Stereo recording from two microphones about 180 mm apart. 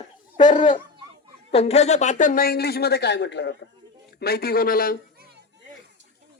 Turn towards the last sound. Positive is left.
turn(degrees=55)  # may be behind; listen again after turning